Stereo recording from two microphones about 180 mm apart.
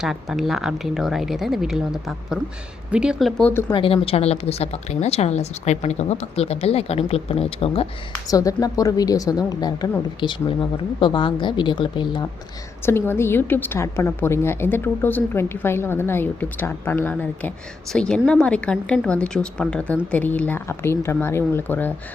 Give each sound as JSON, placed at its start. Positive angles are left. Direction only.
{"t": 0.0, "sound": "speech", "side_deg": 0}
{"t": 3.7, "sound": "a woman's voice", "side_deg": 30}
{"t": 8.3, "sound": "speech", "side_deg": 20}
{"t": 12.8, "sound": "a woman's voice", "side_deg": 15}